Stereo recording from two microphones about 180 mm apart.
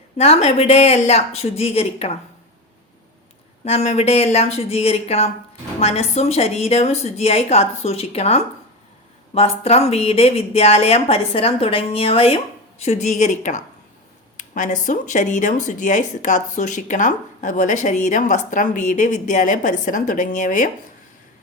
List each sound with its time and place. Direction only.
0.2 s speech: 35° left (ahead or behind)
3.6 s speech: 35° left (ahead or behind)